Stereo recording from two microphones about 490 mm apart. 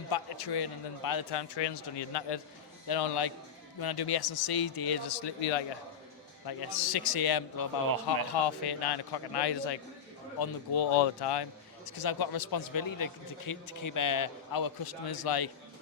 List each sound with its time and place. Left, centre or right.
0.1 s a man's voice: left
6.4 s a man's voice: left